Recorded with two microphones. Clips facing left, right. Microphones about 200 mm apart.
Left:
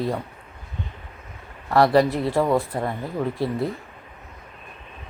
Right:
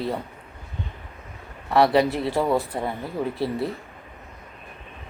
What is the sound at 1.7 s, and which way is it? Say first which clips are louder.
Speech: left 1 dB; centre (ahead or behind).